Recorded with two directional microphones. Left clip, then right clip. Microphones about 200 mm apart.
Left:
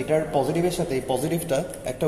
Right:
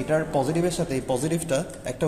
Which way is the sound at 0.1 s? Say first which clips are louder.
Left 1 dB; 50° right (ahead or behind).